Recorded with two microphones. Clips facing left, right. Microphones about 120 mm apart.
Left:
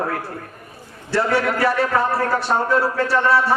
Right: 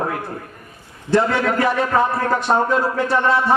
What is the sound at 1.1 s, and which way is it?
A man's voice, 20° right (ahead or behind).